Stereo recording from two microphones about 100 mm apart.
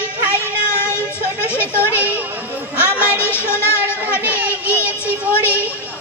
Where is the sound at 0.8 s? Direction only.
25° left (ahead or behind).